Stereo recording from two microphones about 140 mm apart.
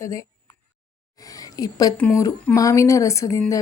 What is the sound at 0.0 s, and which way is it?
A woman's voice, 25° left (ahead or behind).